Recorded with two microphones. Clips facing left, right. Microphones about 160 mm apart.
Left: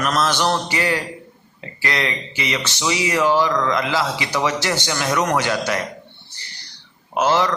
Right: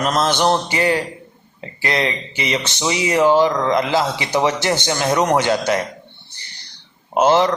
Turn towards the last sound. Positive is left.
turn(degrees=-25)  # may be behind; listen again after turning